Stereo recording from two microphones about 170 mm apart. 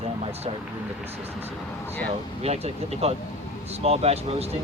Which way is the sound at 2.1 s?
35° right (ahead or behind).